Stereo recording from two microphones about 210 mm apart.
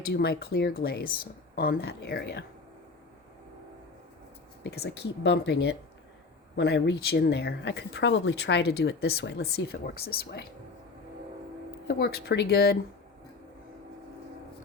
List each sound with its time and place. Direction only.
0.0 s speech: 50° left (ahead or behind)
4.6 s speech: 50° left (ahead or behind)
6.6 s speech: 55° left (ahead or behind)
11.9 s speech: 50° left (ahead or behind)